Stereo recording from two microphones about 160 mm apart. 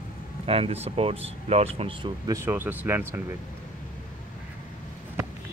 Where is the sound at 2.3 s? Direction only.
15° right (ahead or behind).